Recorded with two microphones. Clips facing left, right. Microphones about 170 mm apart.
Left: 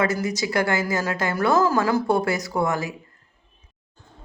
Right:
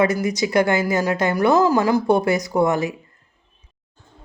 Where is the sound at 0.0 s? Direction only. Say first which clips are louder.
Right 4 dB; 15° right (ahead or behind).